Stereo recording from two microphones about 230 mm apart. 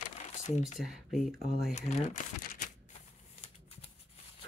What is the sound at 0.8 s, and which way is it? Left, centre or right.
Speech, centre.